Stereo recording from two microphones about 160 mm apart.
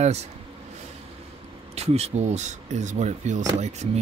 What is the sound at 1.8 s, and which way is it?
Speech, 40° right (ahead or behind).